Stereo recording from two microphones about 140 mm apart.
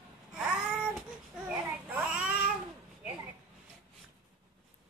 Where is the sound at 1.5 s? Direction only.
10° right (ahead or behind).